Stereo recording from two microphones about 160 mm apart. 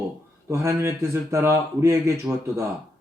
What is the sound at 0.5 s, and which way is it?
Speech, 15° right (ahead or behind).